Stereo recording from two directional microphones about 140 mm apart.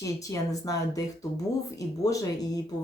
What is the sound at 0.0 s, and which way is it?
Speech, 25° left (ahead or behind).